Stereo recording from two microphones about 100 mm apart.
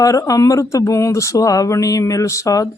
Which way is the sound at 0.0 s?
35° left (ahead or behind).